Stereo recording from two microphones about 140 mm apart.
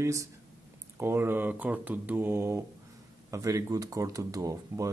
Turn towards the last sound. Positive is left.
turn(degrees=-20)  # may be behind; listen again after turning